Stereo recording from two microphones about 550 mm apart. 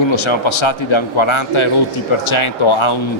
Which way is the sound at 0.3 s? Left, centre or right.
Left.